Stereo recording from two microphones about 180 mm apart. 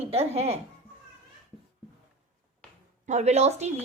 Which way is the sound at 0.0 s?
35° right (ahead or behind).